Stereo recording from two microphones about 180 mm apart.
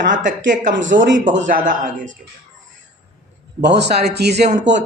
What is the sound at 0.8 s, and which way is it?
A man's voice, 45° right (ahead or behind).